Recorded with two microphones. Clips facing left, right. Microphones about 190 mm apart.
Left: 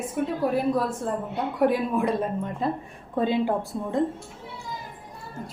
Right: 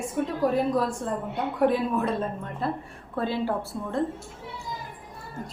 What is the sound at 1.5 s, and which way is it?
A woman's voice, 10° left (ahead or behind).